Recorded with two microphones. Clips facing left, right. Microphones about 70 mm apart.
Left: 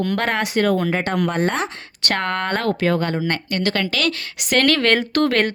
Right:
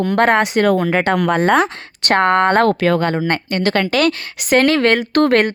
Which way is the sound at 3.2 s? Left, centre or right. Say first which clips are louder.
Right 4 dB; right.